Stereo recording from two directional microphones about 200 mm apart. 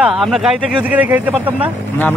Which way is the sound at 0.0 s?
Centre (ahead or behind).